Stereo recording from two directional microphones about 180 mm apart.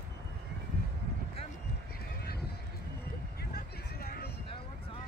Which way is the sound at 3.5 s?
60° left (ahead or behind).